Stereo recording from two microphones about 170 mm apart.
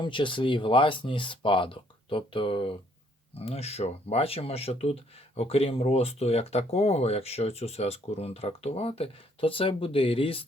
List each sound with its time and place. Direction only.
0.0 s speech: 30° left (ahead or behind)